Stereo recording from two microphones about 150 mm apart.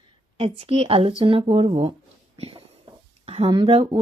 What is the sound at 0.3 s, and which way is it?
A woman's voice, 40° right (ahead or behind).